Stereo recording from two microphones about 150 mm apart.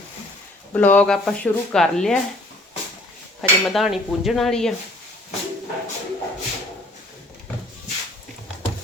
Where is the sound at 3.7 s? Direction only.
Centre (ahead or behind).